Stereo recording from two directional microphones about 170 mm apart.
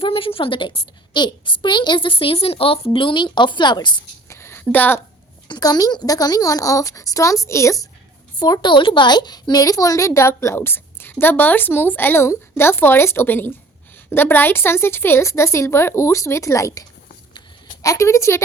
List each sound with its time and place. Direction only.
0.0 s a woman's voice: 30° left (ahead or behind); by 4.9 s 10° left (ahead or behind)
5.5 s a woman's voice: 25° left (ahead or behind)
17.8 s a woman's voice: 15° left (ahead or behind)